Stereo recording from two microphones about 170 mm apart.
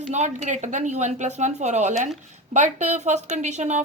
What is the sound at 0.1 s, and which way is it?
A woman's voice, 45° right (ahead or behind).